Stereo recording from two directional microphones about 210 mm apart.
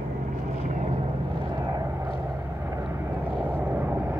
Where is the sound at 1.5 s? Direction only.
15° right (ahead or behind).